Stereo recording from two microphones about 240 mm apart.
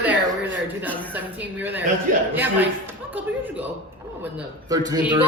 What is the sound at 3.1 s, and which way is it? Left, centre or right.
A woman's voice, centre.